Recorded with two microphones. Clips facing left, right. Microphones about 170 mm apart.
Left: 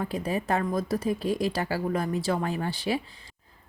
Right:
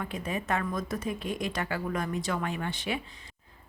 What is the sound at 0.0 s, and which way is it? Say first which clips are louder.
A woman's voice: left 5 dB; 35° left (ahead or behind).